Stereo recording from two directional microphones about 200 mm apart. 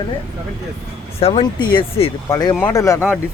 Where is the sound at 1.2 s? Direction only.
25° left (ahead or behind).